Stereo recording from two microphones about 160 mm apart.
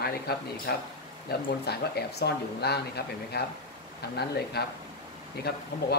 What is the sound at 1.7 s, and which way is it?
Speech, 90° left.